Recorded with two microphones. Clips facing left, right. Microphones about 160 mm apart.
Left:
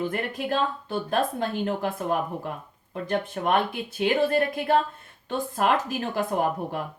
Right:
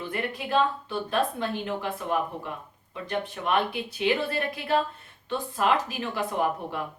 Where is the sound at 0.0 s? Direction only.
45° left (ahead or behind).